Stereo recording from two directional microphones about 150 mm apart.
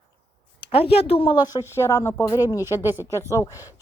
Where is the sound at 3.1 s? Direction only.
20° left (ahead or behind).